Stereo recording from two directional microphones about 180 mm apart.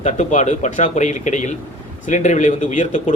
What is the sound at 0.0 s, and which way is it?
Speech, 40° left (ahead or behind).